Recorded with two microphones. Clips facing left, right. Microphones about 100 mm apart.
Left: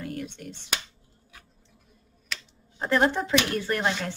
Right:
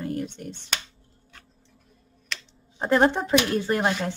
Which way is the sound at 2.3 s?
5° left (ahead or behind).